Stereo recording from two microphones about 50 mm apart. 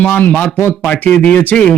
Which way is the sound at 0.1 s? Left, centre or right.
Left.